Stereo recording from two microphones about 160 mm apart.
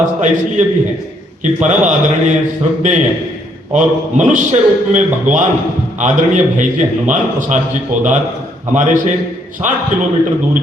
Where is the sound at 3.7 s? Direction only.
50° right (ahead or behind).